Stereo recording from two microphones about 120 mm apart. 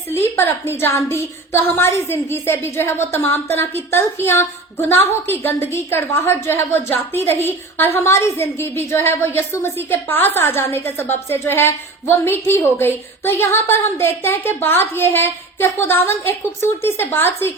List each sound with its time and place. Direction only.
0.3 s a woman's voice: 20° left (ahead or behind)